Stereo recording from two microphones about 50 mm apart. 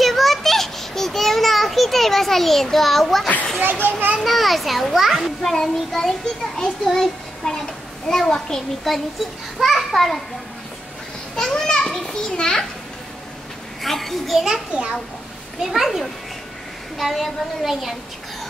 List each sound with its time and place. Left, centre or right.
0.0 s children playing: centre
4.2 s a woman's voice: centre
11.3 s children playing: centre
13.8 s a woman's voice: centre
14.7 s a child's voice: right
15.6 s a woman's voice: centre